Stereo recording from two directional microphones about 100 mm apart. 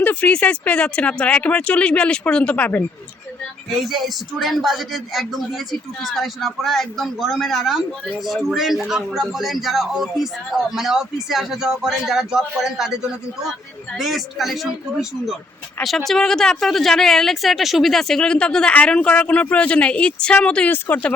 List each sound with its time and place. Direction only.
0.0 s speech: 15° left (ahead or behind)
3.7 s a man's voice: centre (ahead or behind)
16.0 s speech: 5° left (ahead or behind)